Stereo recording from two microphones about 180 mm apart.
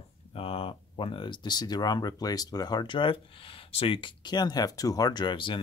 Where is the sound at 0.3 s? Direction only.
30° left (ahead or behind).